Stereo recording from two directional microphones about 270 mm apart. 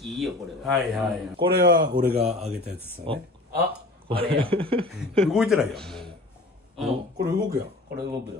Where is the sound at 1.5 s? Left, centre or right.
Right.